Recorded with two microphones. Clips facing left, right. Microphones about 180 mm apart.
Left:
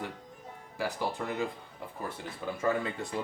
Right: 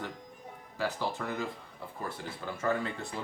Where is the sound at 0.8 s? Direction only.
15° left (ahead or behind).